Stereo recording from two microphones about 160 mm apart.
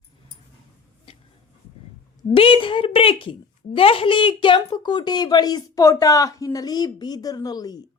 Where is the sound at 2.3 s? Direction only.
35° left (ahead or behind).